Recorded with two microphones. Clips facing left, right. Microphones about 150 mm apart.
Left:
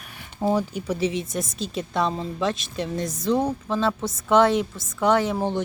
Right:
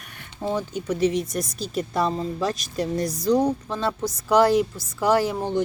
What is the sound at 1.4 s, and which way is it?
Speech, 25° left (ahead or behind).